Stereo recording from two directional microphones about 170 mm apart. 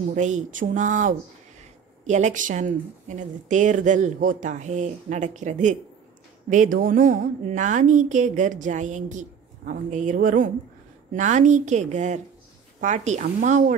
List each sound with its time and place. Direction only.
0.1 s speech: 45° right (ahead or behind)